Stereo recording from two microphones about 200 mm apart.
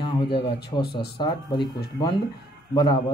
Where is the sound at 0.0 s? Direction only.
25° left (ahead or behind).